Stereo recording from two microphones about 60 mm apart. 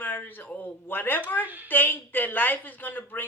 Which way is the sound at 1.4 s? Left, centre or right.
Right.